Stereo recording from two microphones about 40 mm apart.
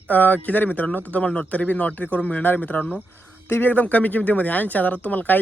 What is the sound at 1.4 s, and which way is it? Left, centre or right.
Speech, left.